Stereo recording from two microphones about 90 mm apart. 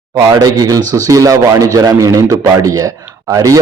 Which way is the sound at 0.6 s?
40° right (ahead or behind).